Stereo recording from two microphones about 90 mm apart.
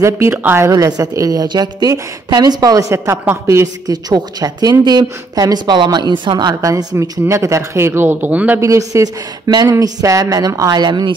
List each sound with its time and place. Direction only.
0.0 s a woman's voice: 30° right (ahead or behind)
0.4 s a woman's voice: 20° right (ahead or behind)
0.7 s a woman's voice: 45° right (ahead or behind)
3.8 s speech: 45° right (ahead or behind); by 8.5 s 15° right (ahead or behind)
8.5 s a woman's voice: 35° right (ahead or behind); by 11.1 s 55° right (ahead or behind)